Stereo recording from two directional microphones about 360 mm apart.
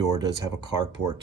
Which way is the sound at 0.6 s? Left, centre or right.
Right.